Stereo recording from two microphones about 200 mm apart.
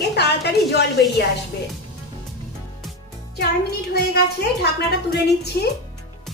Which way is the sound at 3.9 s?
55° left (ahead or behind).